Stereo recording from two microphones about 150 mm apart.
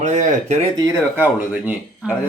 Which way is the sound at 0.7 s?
20° right (ahead or behind).